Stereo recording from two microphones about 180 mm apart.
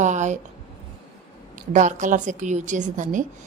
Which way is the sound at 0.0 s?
40° right (ahead or behind).